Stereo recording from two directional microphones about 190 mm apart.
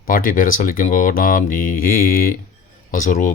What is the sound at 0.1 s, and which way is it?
Speech, 45° left (ahead or behind).